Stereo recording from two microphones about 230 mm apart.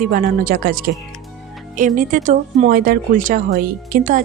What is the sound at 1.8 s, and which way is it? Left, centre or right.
Speech, right.